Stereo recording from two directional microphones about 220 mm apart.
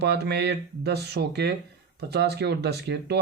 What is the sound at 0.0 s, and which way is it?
Speech, 50° right (ahead or behind).